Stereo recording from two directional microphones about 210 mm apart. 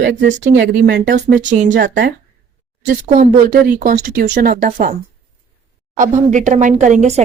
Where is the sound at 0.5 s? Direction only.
55° right (ahead or behind).